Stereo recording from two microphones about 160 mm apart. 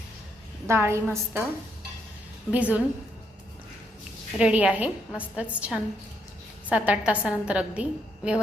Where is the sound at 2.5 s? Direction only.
10° right (ahead or behind).